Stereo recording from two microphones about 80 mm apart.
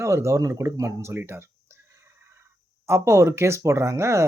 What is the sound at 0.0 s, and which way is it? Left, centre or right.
Speech, right.